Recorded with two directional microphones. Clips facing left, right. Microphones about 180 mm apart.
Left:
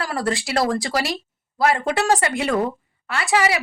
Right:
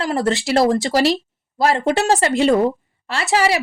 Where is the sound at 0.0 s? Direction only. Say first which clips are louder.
Right 5 dB; 25° right (ahead or behind).